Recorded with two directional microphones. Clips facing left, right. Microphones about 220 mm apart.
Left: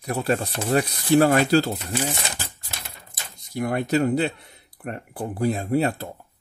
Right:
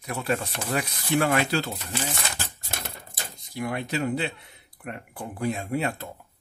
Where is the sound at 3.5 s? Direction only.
45° left (ahead or behind).